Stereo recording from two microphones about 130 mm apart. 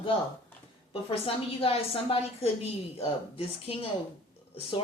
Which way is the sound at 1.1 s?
45° left (ahead or behind).